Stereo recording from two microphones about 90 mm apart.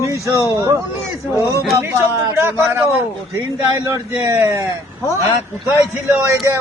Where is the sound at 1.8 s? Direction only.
30° right (ahead or behind).